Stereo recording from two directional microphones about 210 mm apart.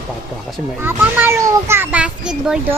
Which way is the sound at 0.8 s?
10° right (ahead or behind).